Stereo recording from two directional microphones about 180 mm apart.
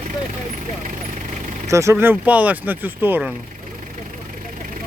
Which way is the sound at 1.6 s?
15° right (ahead or behind).